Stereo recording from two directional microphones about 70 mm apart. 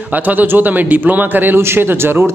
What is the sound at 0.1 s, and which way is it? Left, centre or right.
A man's voice, right.